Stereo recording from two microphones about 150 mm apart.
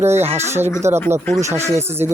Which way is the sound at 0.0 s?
15° right (ahead or behind).